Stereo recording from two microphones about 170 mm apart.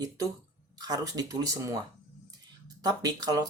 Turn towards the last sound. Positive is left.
turn(degrees=-20)  # may be behind; listen again after turning